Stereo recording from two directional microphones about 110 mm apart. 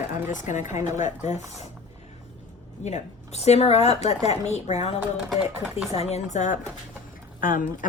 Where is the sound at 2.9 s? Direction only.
85° left.